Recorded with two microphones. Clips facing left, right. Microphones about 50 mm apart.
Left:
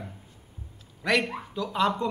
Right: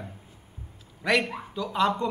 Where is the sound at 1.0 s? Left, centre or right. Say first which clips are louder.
Right 1 dB; centre.